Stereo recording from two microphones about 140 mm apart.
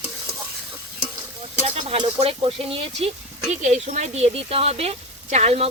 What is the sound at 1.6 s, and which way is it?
Speech, 45° right (ahead or behind).